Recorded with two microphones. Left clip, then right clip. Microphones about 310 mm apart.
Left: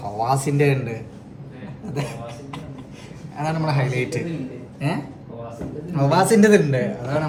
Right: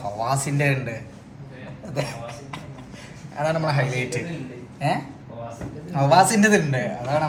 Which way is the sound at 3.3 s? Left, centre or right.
Centre.